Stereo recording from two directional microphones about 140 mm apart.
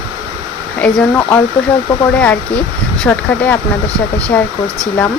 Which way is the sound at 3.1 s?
10° left (ahead or behind).